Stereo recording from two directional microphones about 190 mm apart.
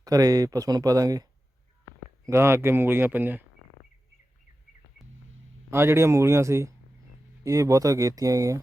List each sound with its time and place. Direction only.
0.0 s speech: 20° right (ahead or behind)
5.7 s speech: 15° right (ahead or behind)